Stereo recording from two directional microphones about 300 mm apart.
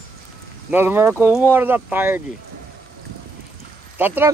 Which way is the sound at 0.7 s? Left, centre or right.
Centre.